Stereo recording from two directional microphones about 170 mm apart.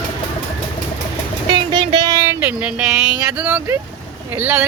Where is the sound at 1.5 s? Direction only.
25° right (ahead or behind).